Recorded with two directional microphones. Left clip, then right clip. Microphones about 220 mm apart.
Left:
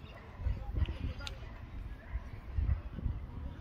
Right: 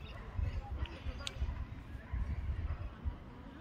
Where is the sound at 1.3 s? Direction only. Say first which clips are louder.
Right 3 dB; 20° left (ahead or behind).